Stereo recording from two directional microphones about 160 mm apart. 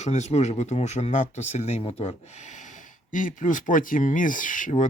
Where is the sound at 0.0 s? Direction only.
45° left (ahead or behind).